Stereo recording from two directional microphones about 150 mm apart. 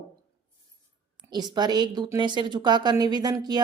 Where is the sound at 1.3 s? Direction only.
30° right (ahead or behind).